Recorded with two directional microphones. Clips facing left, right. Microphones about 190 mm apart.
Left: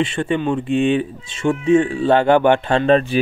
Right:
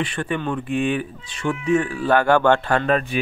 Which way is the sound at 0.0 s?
25° left (ahead or behind).